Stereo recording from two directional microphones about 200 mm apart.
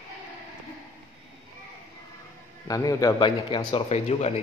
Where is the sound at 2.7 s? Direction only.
15° left (ahead or behind).